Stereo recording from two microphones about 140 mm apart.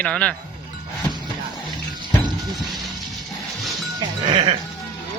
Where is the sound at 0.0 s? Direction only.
10° left (ahead or behind).